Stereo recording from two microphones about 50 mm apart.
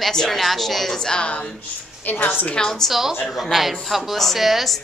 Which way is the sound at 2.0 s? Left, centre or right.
Left.